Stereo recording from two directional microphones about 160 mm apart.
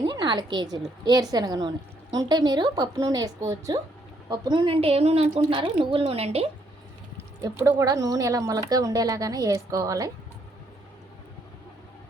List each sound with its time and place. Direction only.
0.0 s a woman's voice: 30° right (ahead or behind)
7.6 s a woman's voice: 20° right (ahead or behind)